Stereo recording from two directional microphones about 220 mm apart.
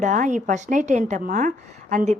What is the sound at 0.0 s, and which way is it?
A woman's voice, 35° right (ahead or behind).